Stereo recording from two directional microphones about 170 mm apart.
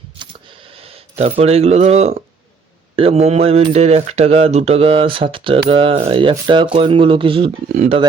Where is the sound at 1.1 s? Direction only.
35° right (ahead or behind).